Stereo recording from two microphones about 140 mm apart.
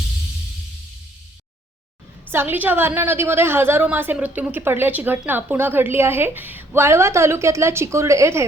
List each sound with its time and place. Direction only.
2.3 s a woman's voice: 15° right (ahead or behind)